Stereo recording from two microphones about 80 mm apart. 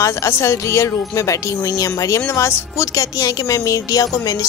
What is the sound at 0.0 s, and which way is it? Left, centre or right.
Speech, left.